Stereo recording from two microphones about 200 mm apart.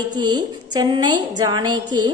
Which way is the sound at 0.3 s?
20° right (ahead or behind).